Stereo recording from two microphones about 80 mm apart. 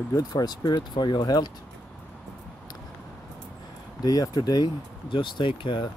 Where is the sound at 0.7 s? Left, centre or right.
Left.